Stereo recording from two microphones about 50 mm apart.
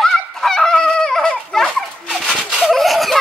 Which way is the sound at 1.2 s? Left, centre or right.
Centre.